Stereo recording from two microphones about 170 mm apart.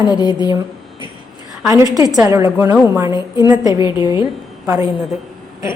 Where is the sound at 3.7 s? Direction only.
25° left (ahead or behind).